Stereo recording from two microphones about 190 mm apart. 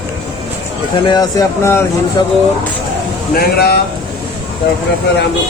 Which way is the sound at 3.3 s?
55° left (ahead or behind).